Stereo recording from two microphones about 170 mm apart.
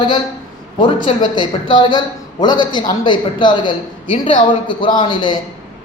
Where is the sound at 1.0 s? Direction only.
25° left (ahead or behind).